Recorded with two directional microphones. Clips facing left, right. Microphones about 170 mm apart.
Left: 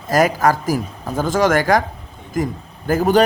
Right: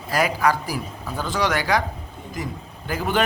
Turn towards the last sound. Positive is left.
turn(degrees=45)  # may be behind; listen again after turning